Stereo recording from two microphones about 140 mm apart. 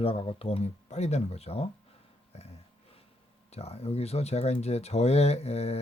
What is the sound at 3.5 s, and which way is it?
Speech, 45° left (ahead or behind).